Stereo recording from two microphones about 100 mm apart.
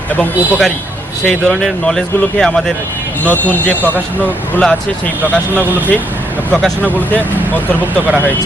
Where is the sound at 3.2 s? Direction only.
15° left (ahead or behind).